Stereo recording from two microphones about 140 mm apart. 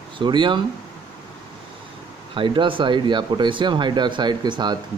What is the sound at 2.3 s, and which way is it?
Speech, 35° right (ahead or behind).